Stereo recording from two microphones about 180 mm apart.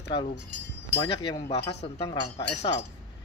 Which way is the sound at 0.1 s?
30° left (ahead or behind).